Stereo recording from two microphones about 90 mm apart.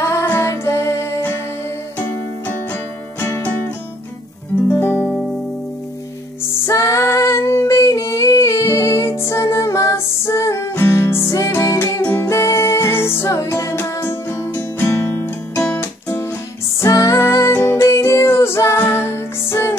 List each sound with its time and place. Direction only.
0.0 s music: 25° left (ahead or behind)
4.6 s guitar: 25° left (ahead or behind)
6.6 s female singing: 35° left (ahead or behind)
12.0 s music: 25° left (ahead or behind)